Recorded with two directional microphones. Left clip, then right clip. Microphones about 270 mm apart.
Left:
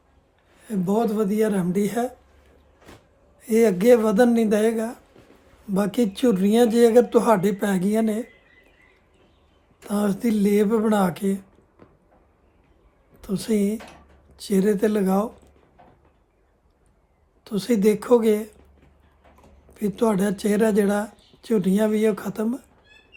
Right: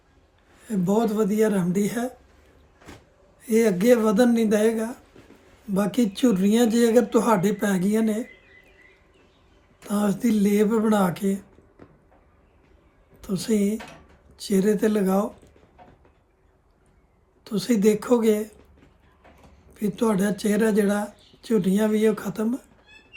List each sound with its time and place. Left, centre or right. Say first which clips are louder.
0.6 s speech: even; centre
3.4 s speech: left 2 dB; centre
9.8 s speech: left 1 dB; centre
13.2 s speech: left 1 dB; centre
17.4 s speech: left 1 dB; centre
19.7 s speech: left 2 dB; centre